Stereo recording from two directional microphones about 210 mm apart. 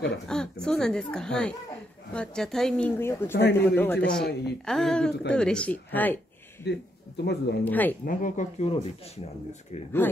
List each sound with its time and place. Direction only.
0.3 s a man's voice: 5° left (ahead or behind)
4.2 s a woman's voice: 50° left (ahead or behind)
4.6 s speech: centre (ahead or behind)
6.6 s speech: 50° left (ahead or behind)
7.6 s a man's voice: 10° left (ahead or behind)
8.0 s speech: 40° left (ahead or behind)